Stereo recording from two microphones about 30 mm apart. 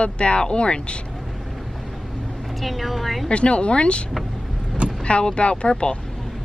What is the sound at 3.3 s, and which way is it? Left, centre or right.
Speech, left.